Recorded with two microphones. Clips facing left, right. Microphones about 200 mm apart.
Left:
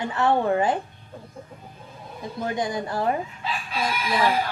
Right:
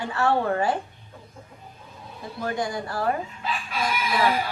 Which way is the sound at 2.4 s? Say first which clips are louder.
Left 1 dB; 20° left (ahead or behind).